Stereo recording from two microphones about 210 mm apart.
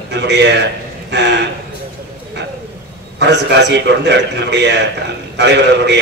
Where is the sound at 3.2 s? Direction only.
55° right (ahead or behind).